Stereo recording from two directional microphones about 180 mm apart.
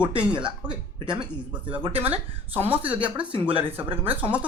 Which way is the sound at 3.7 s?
10° right (ahead or behind).